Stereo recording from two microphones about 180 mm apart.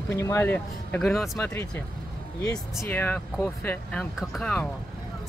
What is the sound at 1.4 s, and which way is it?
Speech, 15° left (ahead or behind).